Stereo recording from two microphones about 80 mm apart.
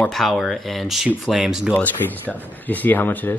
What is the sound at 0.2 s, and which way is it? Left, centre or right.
Speech, centre.